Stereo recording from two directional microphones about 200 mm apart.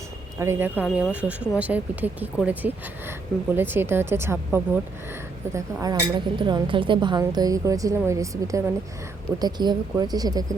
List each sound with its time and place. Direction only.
0.3 s speech: 10° right (ahead or behind)